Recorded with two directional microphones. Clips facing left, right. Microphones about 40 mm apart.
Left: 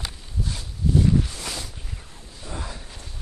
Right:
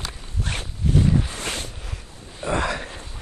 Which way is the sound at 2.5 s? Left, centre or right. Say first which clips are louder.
Right 12 dB; right.